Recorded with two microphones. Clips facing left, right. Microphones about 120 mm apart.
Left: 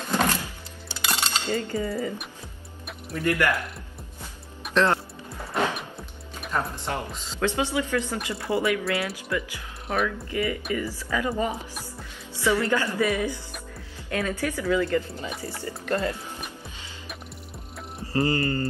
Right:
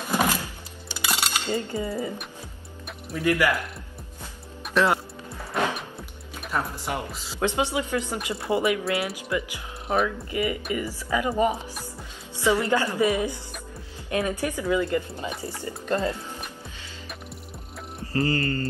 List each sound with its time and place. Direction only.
0.0 s music: 10° right (ahead or behind)
0.9 s coin: 10° right (ahead or behind)
3.1 s speech: 5° right (ahead or behind)
4.6 s music: 10° right (ahead or behind)
6.4 s speech: 5° right (ahead or behind)
7.3 s speech: 20° right (ahead or behind)
18.1 s mantra: 20° left (ahead or behind)